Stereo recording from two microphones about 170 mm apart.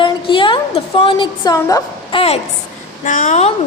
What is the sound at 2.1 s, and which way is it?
Speech, 35° left (ahead or behind).